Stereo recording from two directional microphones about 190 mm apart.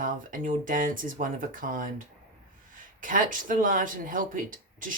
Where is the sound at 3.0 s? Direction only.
45° right (ahead or behind).